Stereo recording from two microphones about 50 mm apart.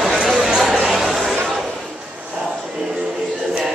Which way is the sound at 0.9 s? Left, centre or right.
Centre.